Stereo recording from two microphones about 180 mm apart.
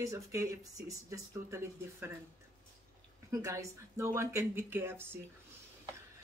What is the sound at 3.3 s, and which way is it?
Speech, 15° right (ahead or behind).